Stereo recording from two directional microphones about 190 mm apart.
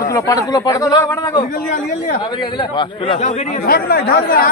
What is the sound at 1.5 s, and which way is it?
Speech, 45° left (ahead or behind).